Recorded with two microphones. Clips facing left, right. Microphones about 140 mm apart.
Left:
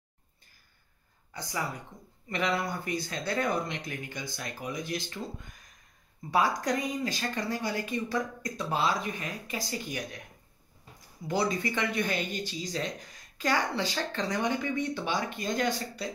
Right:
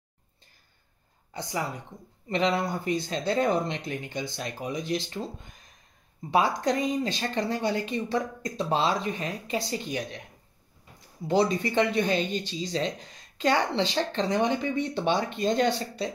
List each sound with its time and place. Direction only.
1.3 s a woman's voice: 20° right (ahead or behind)
6.3 s speech: 25° right (ahead or behind)
11.2 s speech: 25° right (ahead or behind)